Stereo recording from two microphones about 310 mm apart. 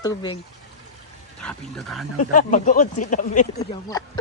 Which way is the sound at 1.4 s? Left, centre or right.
Centre.